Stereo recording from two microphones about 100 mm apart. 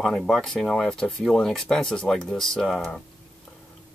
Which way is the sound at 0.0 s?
5° left (ahead or behind).